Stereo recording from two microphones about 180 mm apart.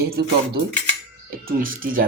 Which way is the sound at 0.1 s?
60° right (ahead or behind).